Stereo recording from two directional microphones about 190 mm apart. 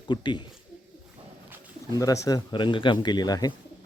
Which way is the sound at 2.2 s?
20° left (ahead or behind).